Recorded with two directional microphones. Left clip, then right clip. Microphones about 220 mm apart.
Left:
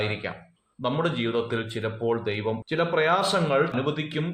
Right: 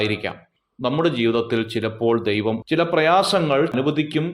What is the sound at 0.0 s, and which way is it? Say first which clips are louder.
A man's voice: right 6 dB; 45° right (ahead or behind).